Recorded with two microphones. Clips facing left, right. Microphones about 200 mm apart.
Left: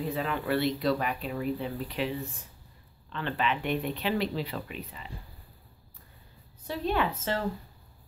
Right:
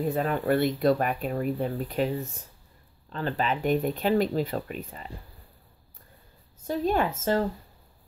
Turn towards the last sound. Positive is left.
turn(degrees=-45)  # may be behind; listen again after turning